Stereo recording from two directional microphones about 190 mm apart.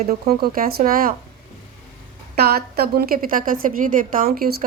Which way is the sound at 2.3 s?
55° right (ahead or behind).